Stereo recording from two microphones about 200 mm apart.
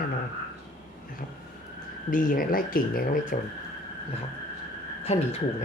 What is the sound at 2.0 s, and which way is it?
Speech, 45° left (ahead or behind).